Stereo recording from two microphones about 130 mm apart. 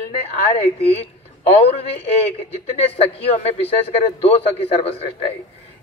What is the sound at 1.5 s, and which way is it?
A man's voice, 50° left (ahead or behind).